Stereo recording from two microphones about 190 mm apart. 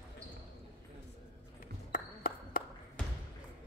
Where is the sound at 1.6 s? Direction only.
50° left (ahead or behind).